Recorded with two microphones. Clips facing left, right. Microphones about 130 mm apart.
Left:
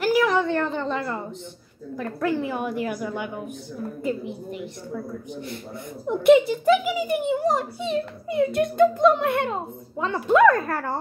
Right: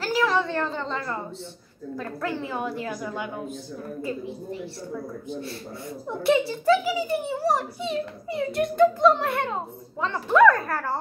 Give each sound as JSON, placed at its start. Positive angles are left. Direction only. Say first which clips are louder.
{"t": 0.0, "sound": "a sound", "louder": "left 3 dB", "side_deg": 15}
{"t": 0.7, "sound": "a child's voice", "louder": "left 3 dB", "side_deg": 20}
{"t": 2.2, "sound": "a woman's voice", "louder": "left 5 dB", "side_deg": 15}
{"t": 5.3, "sound": "a child's voice", "louder": "even", "side_deg": 20}